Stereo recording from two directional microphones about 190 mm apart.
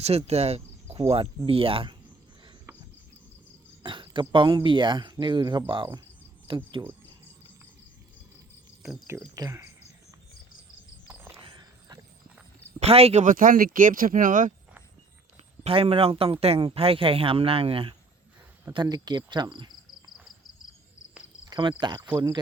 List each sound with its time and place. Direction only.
0.0 s speech: 35° right (ahead or behind)
3.8 s speech: 25° right (ahead or behind)
9.0 s speech: 15° right (ahead or behind)
11.1 s a sound: 10° right (ahead or behind)
11.4 s a sound: 25° right (ahead or behind)
12.8 s speech: 30° right (ahead or behind)
15.6 s speech: 30° right (ahead or behind)
21.5 s speech: 25° right (ahead or behind)